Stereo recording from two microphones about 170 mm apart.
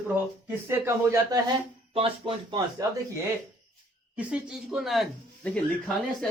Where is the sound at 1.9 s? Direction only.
30° right (ahead or behind).